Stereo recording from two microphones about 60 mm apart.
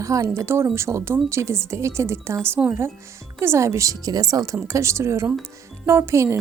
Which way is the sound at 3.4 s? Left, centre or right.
Right.